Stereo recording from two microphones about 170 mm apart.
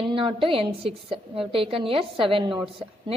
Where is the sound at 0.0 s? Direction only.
30° right (ahead or behind).